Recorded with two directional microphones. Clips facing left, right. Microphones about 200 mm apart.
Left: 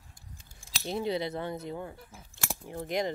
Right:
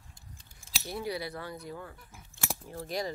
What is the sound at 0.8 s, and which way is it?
Speech, 25° left (ahead or behind).